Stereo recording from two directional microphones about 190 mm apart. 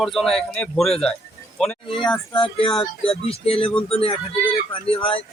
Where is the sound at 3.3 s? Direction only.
30° left (ahead or behind).